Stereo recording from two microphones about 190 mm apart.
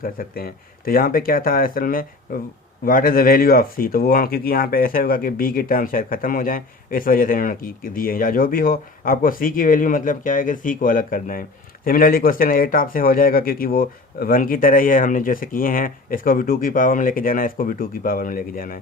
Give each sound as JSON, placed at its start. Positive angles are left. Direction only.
{"t": 0.0, "sound": "speech", "side_deg": 50}